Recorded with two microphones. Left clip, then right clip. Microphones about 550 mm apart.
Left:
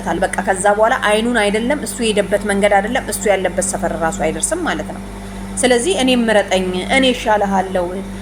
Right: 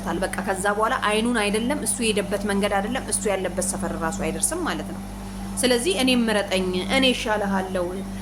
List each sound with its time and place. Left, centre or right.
0.1 s a woman's voice: right